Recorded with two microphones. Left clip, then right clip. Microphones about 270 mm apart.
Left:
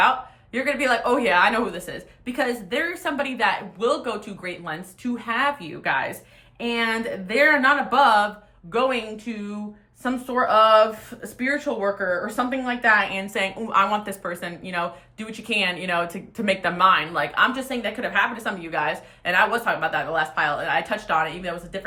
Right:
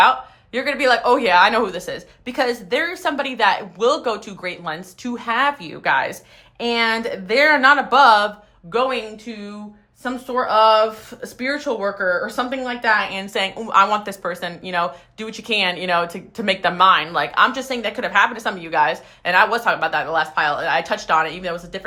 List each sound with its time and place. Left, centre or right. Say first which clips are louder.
0.5 s speech: right 4 dB; centre